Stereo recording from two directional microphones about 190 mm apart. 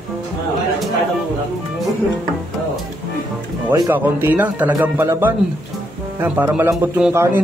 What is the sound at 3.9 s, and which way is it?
Speech, 10° right (ahead or behind).